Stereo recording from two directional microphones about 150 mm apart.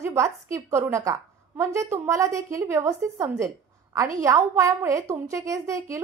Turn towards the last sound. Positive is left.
turn(degrees=-20)  # may be behind; listen again after turning